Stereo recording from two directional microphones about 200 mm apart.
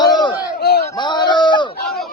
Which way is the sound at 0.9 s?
20° left (ahead or behind).